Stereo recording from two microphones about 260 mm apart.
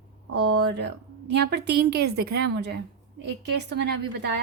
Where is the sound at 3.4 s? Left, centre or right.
Right.